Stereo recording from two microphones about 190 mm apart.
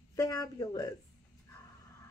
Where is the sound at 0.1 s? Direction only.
20° left (ahead or behind).